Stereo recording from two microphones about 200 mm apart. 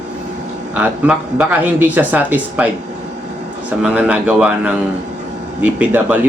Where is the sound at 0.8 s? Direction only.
10° right (ahead or behind).